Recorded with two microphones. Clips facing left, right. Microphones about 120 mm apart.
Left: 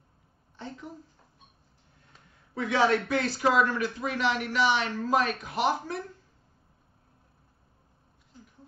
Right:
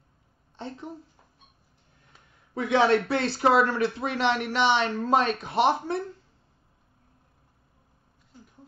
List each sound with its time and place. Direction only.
0.6 s speech: 25° right (ahead or behind)
2.6 s speech: 25° right (ahead or behind)